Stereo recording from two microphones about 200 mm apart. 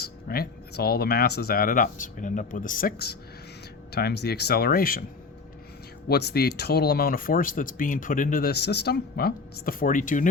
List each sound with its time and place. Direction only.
0.0 s speech: 50° left (ahead or behind)
6.1 s speech: 55° left (ahead or behind)